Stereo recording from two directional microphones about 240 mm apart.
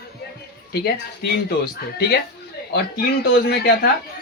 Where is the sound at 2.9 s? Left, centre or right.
Left.